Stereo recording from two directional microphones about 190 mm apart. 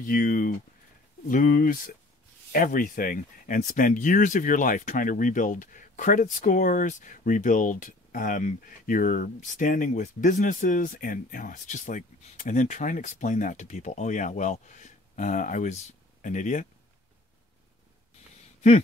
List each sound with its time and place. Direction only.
0.0 s speech: 50° left (ahead or behind)